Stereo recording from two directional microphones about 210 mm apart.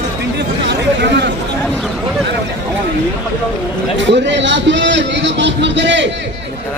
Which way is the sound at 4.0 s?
55° right (ahead or behind).